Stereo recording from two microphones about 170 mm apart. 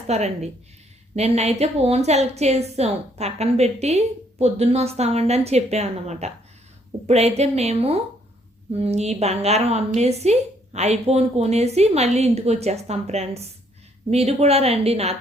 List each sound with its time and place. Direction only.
0.1 s a woman's voice: 40° right (ahead or behind)